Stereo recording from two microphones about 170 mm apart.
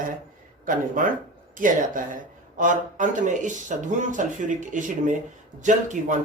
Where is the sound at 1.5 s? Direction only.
50° right (ahead or behind).